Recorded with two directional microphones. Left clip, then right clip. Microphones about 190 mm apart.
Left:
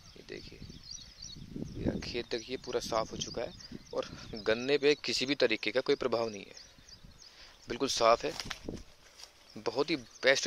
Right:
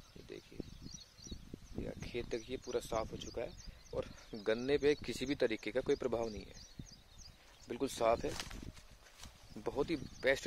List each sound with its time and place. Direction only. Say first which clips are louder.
2.0 s speech: left 5 dB; centre (ahead or behind)
7.6 s speech: left 7 dB; 5° right (ahead or behind)
8.5 s a sound: left 10 dB; 50° left (ahead or behind)
9.6 s speech: left 5 dB; 5° right (ahead or behind)